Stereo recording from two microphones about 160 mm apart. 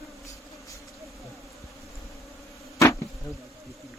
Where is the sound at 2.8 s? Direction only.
20° left (ahead or behind).